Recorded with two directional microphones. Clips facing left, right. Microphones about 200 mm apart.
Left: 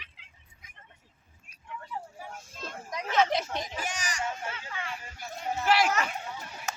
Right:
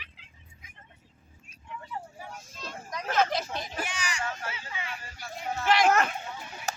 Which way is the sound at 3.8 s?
45° left (ahead or behind).